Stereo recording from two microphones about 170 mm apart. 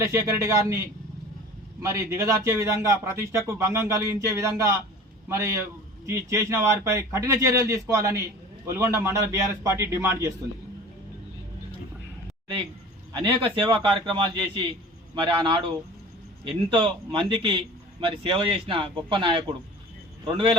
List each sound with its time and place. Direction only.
0.0 s a man's voice: 20° right (ahead or behind)
13.1 s speech: 30° right (ahead or behind)